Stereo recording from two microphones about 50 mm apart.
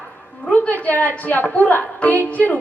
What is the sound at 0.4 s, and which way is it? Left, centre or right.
A woman's voice, left.